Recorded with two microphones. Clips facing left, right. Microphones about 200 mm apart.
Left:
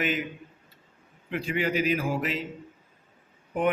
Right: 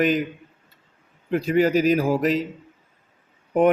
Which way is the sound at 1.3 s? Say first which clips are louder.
Right 9 dB; 40° right (ahead or behind).